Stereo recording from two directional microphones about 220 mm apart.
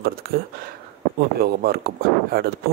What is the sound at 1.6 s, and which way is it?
Speech, 45° right (ahead or behind).